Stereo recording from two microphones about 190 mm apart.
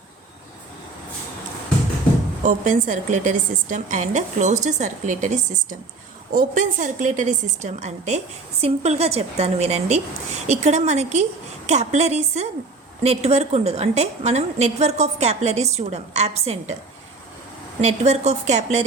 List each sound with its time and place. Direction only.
2.4 s a woman's voice: 45° right (ahead or behind)
17.7 s a woman's voice: 35° right (ahead or behind)